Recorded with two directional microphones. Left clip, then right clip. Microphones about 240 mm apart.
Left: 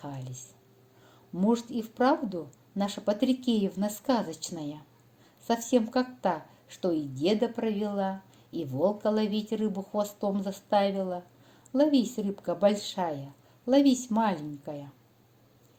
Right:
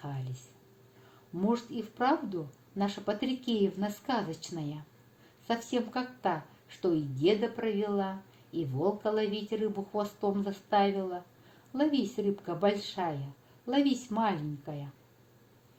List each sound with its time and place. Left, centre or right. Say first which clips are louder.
1.4 s speech: left 4 dB; left